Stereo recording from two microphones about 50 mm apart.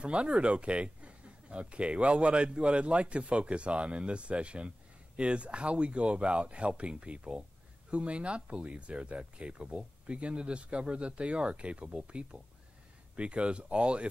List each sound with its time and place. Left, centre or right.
0.0 s speech: right